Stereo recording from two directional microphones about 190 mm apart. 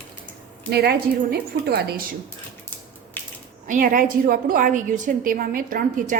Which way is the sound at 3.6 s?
45° right (ahead or behind).